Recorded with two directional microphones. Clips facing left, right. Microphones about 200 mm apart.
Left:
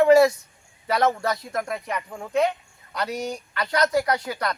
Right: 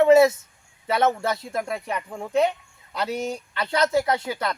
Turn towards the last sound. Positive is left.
turn(degrees=-25)  # may be behind; listen again after turning